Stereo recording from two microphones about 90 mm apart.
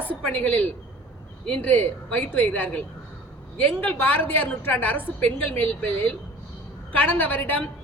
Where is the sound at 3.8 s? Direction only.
20° left (ahead or behind).